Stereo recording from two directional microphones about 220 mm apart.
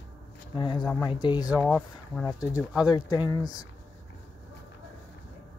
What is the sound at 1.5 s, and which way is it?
Speech, 5° right (ahead or behind).